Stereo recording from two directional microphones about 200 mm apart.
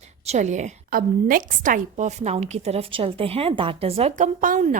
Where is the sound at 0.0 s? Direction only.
35° right (ahead or behind).